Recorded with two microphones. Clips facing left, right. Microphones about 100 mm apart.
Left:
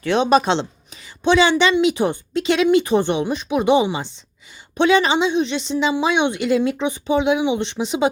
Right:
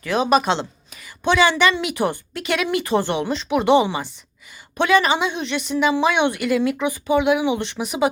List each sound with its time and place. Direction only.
0.0 s a woman's voice: 30° left (ahead or behind)